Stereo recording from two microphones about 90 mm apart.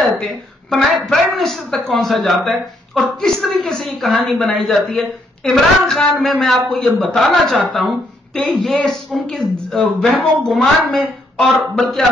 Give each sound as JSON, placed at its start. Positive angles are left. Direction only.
{"t": 0.0, "sound": "a woman's voice", "side_deg": 0}
{"t": 8.6, "sound": "a woman's voice", "side_deg": 5}